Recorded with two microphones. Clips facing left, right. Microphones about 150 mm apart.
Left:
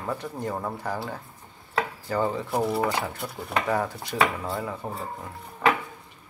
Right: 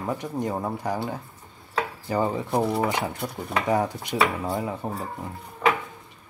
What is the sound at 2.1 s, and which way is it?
Speech, 15° right (ahead or behind).